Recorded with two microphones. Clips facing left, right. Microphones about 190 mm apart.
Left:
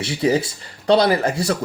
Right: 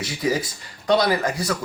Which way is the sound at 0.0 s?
30° left (ahead or behind).